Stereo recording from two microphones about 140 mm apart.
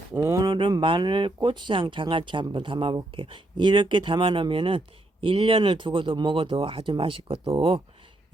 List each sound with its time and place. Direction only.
0.1 s speech: 20° right (ahead or behind); by 7.8 s 40° right (ahead or behind)